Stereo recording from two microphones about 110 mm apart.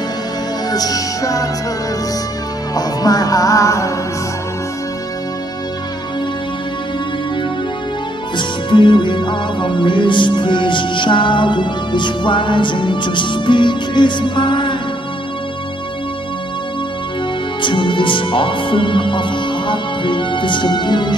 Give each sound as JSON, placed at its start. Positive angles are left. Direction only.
{"t": 0.7, "sound": "music", "side_deg": 35}
{"t": 2.7, "sound": "music", "side_deg": 35}
{"t": 8.4, "sound": "music", "side_deg": 45}
{"t": 17.6, "sound": "music", "side_deg": 45}